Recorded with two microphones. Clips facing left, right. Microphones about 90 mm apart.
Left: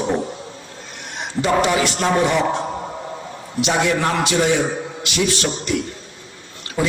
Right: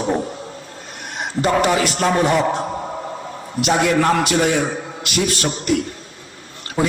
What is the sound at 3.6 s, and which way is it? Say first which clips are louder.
A man's voice: right 2 dB; 50° right (ahead or behind).